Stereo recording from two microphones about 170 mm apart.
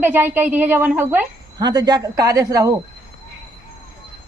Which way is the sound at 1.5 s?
25° right (ahead or behind).